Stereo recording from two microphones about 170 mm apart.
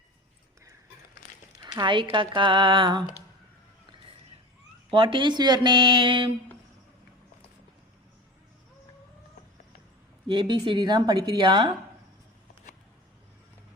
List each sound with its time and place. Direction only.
1.6 s speech: 25° right (ahead or behind)
4.9 s speech: 30° right (ahead or behind)
10.2 s speech: 30° right (ahead or behind)